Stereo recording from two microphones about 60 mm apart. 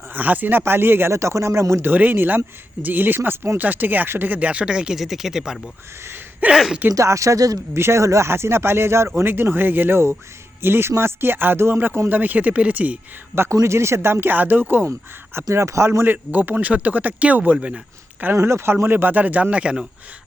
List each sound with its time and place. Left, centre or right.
0.1 s speech: right
1.1 s speech: right
1.9 s speech: right
3.6 s speech: right; by 4.9 s centre
4.9 s speech: centre
6.9 s speech: right
7.7 s speech: right
8.3 s speech: right
13.3 s speech: right
15.5 s speech: right
15.9 s speech: right
18.3 s speech: right; by 19.8 s centre